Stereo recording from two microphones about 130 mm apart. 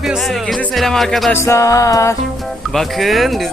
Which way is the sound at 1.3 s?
20° left (ahead or behind).